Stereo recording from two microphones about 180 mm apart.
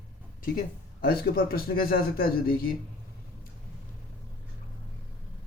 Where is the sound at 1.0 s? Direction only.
55° left (ahead or behind).